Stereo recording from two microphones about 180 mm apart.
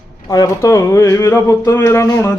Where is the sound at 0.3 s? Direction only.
20° left (ahead or behind).